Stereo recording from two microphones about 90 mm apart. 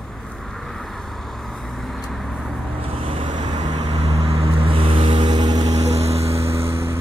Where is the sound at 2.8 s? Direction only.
85° right; by 3.9 s 55° right (ahead or behind).